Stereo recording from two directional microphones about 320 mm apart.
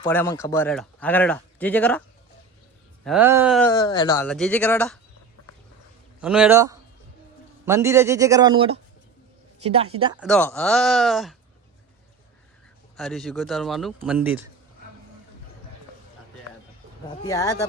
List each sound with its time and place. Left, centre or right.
0.0 s speech: centre
6.2 s a man's voice: centre
10.2 s speech: centre
13.0 s speech: centre
17.2 s speech: centre